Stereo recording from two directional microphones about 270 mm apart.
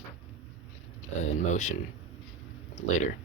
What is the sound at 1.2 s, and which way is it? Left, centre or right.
Speech, left.